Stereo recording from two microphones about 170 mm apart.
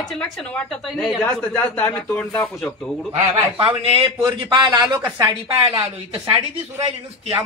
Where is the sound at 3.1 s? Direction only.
30° right (ahead or behind).